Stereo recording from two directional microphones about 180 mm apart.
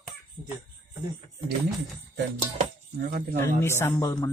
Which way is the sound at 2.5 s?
45° right (ahead or behind).